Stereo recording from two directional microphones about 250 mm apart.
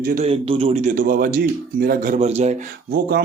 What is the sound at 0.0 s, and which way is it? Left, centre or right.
A man's voice, right.